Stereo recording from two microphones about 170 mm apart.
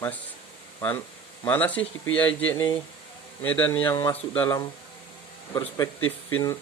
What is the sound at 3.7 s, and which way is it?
Speech, 25° left (ahead or behind).